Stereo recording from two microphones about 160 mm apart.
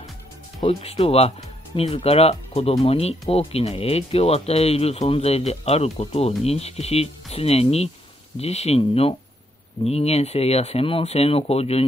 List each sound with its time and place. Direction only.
0.6 s speech: 35° left (ahead or behind)